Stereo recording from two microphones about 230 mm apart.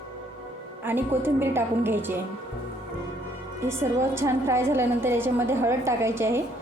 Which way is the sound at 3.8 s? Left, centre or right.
Centre.